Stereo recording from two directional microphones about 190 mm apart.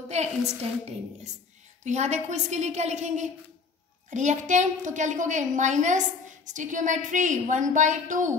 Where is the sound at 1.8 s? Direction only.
35° right (ahead or behind).